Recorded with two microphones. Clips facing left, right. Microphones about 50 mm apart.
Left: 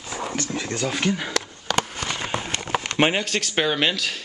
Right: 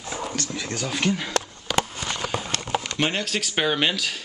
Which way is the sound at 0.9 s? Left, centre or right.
Centre.